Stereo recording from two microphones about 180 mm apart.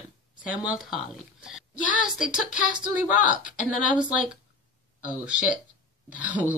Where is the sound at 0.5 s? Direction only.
5° right (ahead or behind).